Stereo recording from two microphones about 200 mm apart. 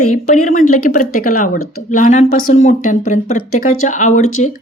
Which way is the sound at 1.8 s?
40° left (ahead or behind).